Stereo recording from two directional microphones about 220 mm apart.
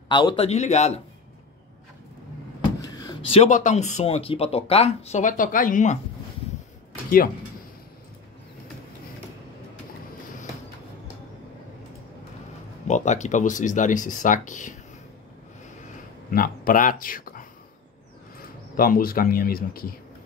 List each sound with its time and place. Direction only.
0.1 s speech: 20° left (ahead or behind)
2.8 s speech: 15° left (ahead or behind); by 5.9 s 35° left (ahead or behind)
12.8 s speech: 30° left (ahead or behind)
16.3 s speech: 40° left (ahead or behind)
18.8 s speech: 40° left (ahead or behind)